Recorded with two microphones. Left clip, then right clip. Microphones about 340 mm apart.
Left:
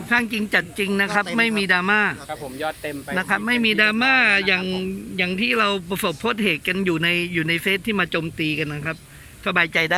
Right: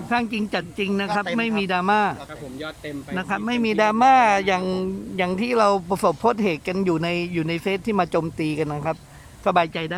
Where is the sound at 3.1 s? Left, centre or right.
Centre.